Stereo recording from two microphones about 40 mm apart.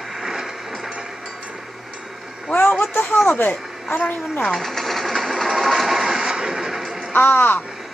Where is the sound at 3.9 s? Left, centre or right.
Left.